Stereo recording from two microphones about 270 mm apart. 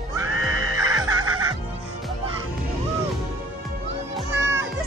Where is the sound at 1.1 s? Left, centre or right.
Right.